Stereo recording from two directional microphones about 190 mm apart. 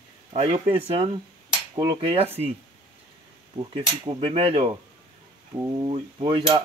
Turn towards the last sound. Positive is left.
turn(degrees=-25)  # may be behind; listen again after turning